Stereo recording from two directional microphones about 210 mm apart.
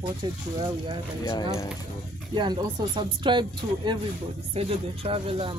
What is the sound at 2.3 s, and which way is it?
Speech, 20° right (ahead or behind).